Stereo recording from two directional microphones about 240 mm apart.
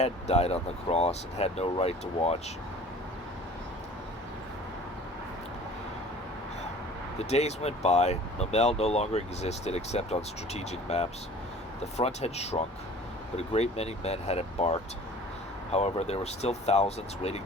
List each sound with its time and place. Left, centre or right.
0.0 s speech: left
7.2 s speech: left